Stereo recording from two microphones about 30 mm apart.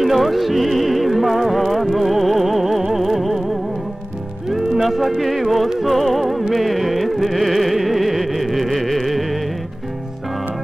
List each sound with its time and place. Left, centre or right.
0.0 s music: centre
4.5 s music: centre